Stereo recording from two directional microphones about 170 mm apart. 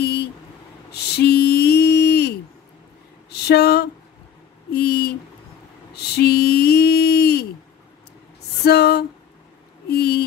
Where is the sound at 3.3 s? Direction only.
75° left (ahead or behind).